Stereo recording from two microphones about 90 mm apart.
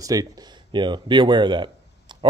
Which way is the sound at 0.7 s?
60° right (ahead or behind).